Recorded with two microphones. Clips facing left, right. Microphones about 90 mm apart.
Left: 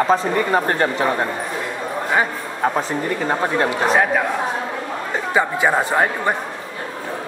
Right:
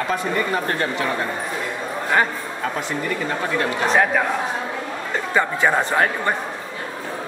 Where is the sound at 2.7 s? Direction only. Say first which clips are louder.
Left 3 dB; 35° left (ahead or behind).